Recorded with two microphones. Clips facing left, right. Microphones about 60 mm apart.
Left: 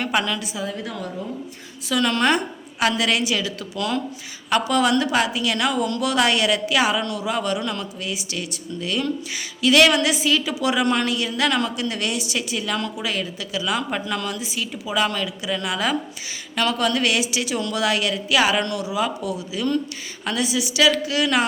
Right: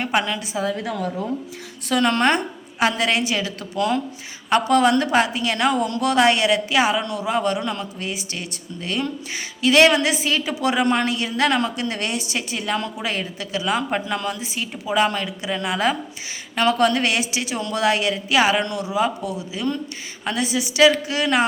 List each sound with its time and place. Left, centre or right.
0.0 s a woman's voice: right
1.9 s a woman's voice: right